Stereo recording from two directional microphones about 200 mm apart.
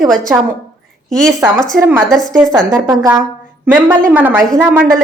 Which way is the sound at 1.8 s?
10° right (ahead or behind).